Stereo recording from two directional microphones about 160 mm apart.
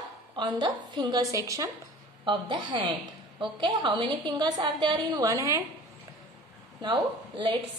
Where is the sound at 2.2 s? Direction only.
30° right (ahead or behind).